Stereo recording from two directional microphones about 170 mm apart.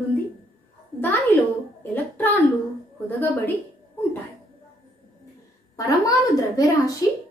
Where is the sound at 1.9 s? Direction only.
10° left (ahead or behind).